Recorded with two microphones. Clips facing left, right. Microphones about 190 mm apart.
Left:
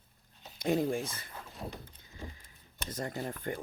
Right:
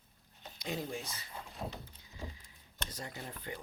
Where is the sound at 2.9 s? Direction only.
50° left (ahead or behind).